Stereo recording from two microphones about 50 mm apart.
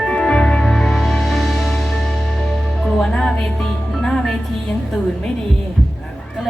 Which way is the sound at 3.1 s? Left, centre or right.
Centre.